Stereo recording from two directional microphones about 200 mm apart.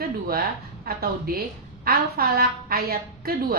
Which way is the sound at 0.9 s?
50° right (ahead or behind).